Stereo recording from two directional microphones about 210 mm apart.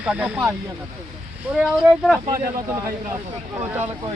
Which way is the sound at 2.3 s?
15° right (ahead or behind).